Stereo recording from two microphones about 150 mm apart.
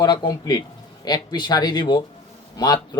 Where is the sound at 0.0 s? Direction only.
30° left (ahead or behind).